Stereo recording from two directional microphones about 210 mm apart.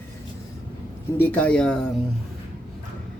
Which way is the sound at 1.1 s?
10° left (ahead or behind).